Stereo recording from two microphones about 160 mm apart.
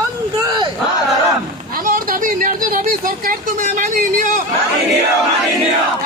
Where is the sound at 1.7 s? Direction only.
60° right (ahead or behind).